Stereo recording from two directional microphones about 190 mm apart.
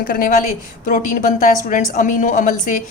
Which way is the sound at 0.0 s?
45° left (ahead or behind).